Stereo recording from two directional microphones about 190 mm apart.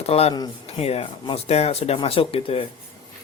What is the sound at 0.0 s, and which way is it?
Speech, 30° left (ahead or behind).